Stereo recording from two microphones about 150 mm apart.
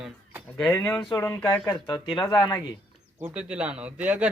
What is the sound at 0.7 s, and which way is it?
Speech, 15° left (ahead or behind).